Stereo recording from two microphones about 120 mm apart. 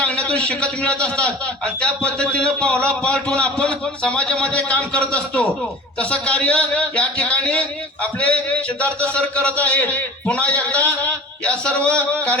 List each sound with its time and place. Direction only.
0.0 s a man's voice: 10° left (ahead or behind)